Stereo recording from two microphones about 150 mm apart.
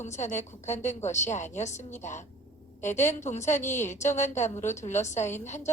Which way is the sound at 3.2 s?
50° left (ahead or behind).